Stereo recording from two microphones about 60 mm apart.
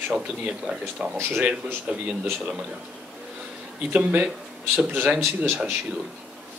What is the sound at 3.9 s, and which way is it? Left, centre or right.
Speech, right.